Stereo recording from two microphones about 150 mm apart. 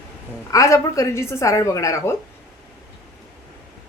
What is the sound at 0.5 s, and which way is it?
A woman's voice, 20° left (ahead or behind).